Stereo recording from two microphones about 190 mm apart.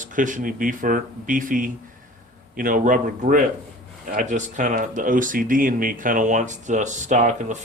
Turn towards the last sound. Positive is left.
turn(degrees=-40)  # may be behind; listen again after turning